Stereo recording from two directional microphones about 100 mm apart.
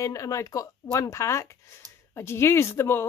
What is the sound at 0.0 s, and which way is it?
A woman's voice, 30° left (ahead or behind).